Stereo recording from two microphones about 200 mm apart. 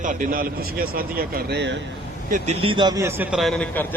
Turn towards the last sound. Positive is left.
turn(degrees=10)  # may be behind; listen again after turning